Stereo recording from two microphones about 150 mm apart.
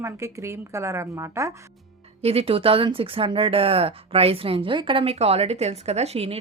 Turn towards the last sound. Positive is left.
turn(degrees=-40)  # may be behind; listen again after turning